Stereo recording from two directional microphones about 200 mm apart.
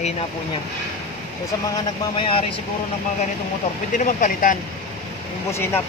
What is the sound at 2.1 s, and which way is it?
Speech, 25° left (ahead or behind).